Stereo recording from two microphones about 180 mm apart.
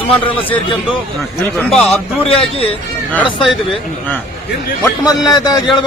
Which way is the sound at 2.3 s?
30° left (ahead or behind).